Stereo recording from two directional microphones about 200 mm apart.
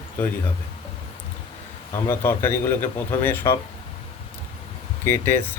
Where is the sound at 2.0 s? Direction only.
10° left (ahead or behind).